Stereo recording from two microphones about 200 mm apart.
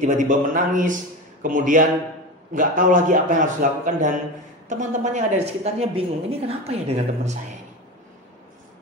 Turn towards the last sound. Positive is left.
turn(degrees=-35)  # may be behind; listen again after turning